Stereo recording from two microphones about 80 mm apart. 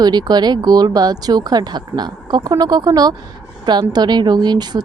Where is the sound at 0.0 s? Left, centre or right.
Right.